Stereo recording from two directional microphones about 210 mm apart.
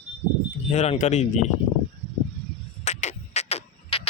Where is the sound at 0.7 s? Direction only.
30° left (ahead or behind).